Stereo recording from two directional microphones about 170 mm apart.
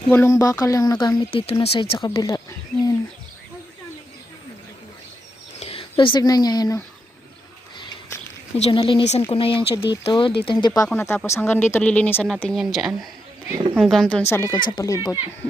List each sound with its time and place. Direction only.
0.1 s speech: 15° left (ahead or behind); by 2.0 s 30° left (ahead or behind)
2.0 s speech: 20° left (ahead or behind)
5.5 s speech: 35° left (ahead or behind)
8.5 s speech: 35° left (ahead or behind)
10.9 s speech: 15° left (ahead or behind)
14.3 s speech: 15° left (ahead or behind)
14.5 s speech: 25° left (ahead or behind)